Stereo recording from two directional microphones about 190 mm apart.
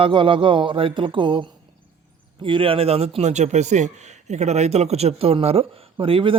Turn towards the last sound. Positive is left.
turn(degrees=-30)  # may be behind; listen again after turning